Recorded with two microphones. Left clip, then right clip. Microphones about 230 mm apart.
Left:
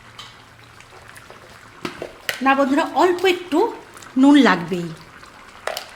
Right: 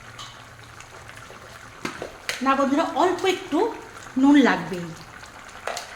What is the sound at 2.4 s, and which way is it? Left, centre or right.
Speech, left.